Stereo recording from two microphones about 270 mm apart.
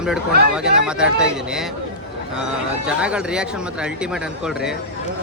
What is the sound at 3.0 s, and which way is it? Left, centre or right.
A man's voice, centre.